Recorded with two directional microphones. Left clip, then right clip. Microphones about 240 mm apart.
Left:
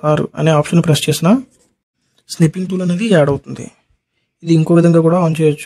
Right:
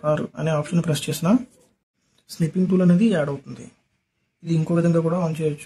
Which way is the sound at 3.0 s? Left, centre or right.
Left.